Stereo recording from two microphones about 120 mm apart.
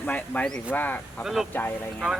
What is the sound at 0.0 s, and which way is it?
Speech, 10° left (ahead or behind).